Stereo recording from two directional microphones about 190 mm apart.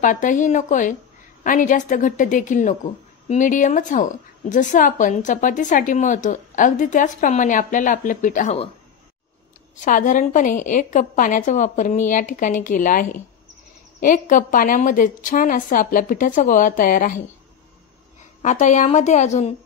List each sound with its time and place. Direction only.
0.0 s a woman's voice: 40° left (ahead or behind)
9.8 s a woman's voice: 40° left (ahead or behind)
18.4 s a woman's voice: 40° left (ahead or behind)